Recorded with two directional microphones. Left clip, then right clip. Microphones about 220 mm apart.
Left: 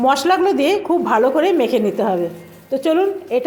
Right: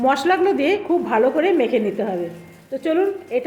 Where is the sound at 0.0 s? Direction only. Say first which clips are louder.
Left 2 dB; 10° left (ahead or behind).